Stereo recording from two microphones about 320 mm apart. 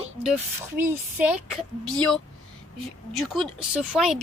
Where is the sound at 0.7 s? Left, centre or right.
Centre.